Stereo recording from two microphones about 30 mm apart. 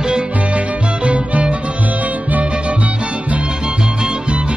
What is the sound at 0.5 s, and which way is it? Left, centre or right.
Music, right.